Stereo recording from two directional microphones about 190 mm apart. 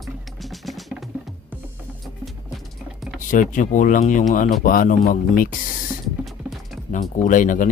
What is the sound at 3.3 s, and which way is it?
Speech, 45° left (ahead or behind).